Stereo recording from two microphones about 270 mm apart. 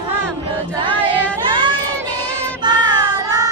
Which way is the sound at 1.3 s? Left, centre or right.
Centre.